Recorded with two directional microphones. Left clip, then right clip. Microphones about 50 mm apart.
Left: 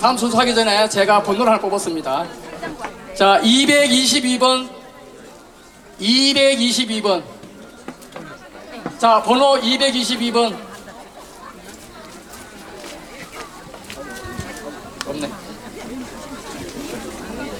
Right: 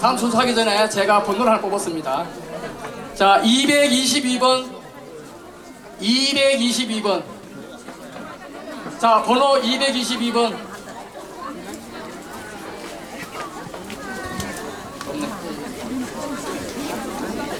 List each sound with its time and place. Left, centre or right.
0.0 s a man's voice: left
6.0 s a man's voice: left
9.0 s a man's voice: left